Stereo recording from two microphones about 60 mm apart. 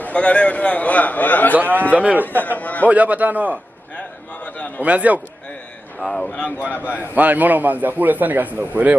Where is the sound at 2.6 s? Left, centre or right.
Left.